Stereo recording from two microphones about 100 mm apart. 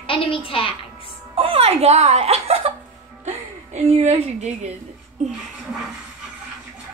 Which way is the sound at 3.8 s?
90° right.